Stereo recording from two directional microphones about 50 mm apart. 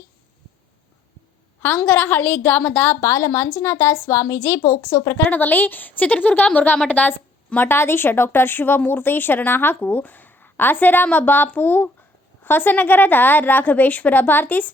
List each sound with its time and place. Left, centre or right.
1.9 s a woman's voice: left
3.0 s a woman's voice: left
3.5 s speech: left
5.3 s a woman's voice: left
7.6 s a woman's voice: left